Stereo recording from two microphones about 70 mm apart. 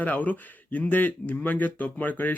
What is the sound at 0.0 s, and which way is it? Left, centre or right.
Speech, left.